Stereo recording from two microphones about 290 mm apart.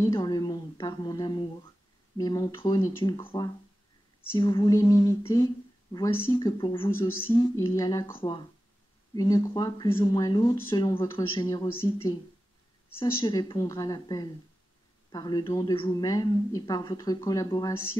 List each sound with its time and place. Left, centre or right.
0.0 s a woman's voice: centre